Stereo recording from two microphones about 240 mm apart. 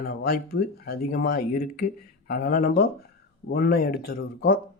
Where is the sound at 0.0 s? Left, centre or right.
Left.